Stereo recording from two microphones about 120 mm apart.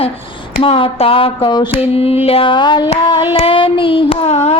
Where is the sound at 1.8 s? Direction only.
55° left (ahead or behind).